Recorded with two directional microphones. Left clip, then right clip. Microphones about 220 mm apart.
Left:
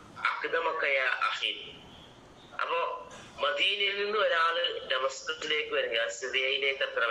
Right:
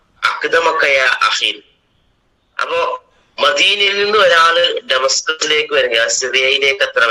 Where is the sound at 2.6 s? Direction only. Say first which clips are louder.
Right 14 dB; 55° right (ahead or behind).